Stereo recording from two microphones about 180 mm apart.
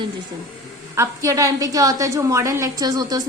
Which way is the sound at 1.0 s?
15° right (ahead or behind).